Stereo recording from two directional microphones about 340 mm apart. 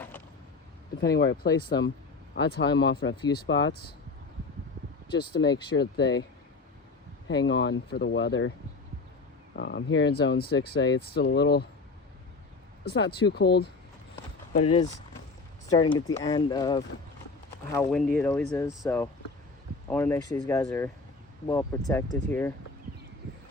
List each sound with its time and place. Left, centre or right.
1.0 s speech: left
5.4 s speech: left
7.3 s speech: left
9.6 s speech: left
12.8 s speech: left
14.5 s speech: centre